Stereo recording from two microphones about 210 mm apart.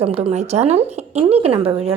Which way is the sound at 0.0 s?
25° right (ahead or behind).